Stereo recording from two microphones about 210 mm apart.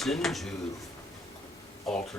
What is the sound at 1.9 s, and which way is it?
Speech, centre (ahead or behind).